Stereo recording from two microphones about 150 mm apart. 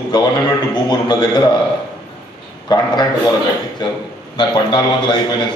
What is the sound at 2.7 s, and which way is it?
Speech, 25° left (ahead or behind).